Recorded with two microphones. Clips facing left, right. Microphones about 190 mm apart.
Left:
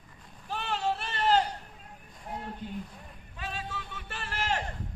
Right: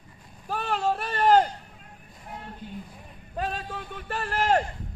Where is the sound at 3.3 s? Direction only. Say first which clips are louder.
Right 7 dB; 45° right (ahead or behind).